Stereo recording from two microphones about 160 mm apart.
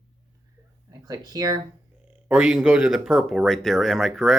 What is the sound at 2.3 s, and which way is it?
Speech, 5° right (ahead or behind).